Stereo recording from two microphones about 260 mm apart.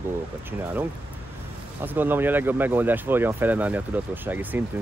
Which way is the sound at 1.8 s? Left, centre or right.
Centre.